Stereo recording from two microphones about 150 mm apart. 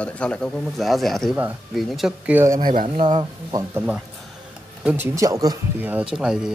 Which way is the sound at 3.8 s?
10° right (ahead or behind).